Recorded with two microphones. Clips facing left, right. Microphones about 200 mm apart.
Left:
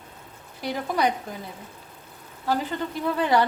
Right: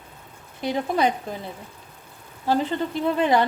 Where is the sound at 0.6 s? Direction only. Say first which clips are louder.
Right 3 dB; 25° right (ahead or behind).